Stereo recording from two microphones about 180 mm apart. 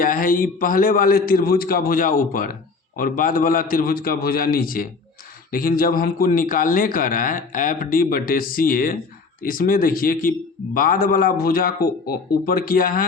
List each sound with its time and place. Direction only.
0.0 s a man's voice: 50° left (ahead or behind)